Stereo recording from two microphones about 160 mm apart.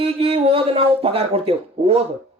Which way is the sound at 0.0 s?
40° right (ahead or behind).